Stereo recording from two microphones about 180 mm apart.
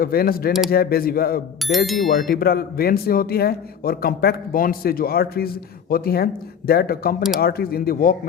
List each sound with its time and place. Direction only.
0.0 s speech: 55° left (ahead or behind)